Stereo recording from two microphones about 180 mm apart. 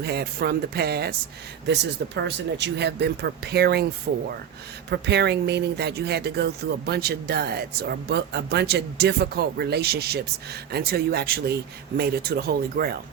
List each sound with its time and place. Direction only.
0.0 s speech: 65° right (ahead or behind)